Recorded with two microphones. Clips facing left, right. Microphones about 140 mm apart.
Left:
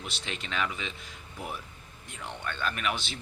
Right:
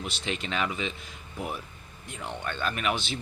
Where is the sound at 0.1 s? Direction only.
5° right (ahead or behind).